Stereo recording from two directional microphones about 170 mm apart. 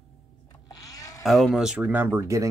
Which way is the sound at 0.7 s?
20° left (ahead or behind).